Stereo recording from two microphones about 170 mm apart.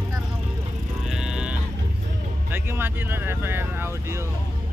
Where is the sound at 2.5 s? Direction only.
10° right (ahead or behind).